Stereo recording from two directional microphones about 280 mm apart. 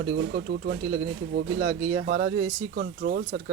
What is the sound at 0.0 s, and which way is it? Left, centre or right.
Speech, right.